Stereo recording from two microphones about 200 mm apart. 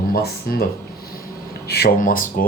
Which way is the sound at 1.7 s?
55° left (ahead or behind).